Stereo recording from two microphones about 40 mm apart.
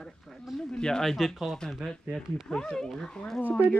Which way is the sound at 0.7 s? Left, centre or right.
Left.